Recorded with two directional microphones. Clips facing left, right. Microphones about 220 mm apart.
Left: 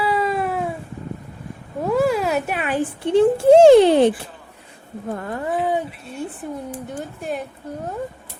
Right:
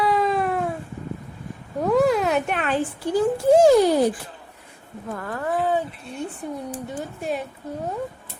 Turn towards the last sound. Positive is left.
turn(degrees=0)  # may be behind; listen again after turning